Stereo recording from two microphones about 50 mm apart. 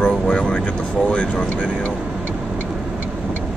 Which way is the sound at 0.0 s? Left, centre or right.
Left.